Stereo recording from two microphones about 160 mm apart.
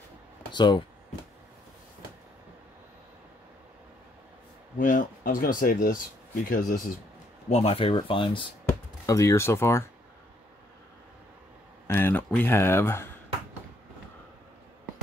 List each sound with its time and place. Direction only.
0.5 s speech: 30° left (ahead or behind)
4.7 s speech: 55° left (ahead or behind)
7.4 s speech: 40° left (ahead or behind)
9.0 s speech: 20° left (ahead or behind)
11.9 s speech: 15° left (ahead or behind)